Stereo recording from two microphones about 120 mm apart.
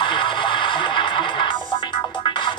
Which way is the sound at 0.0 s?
40° left (ahead or behind).